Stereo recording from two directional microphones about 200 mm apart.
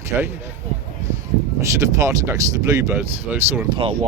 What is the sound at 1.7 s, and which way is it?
Speech, 15° right (ahead or behind).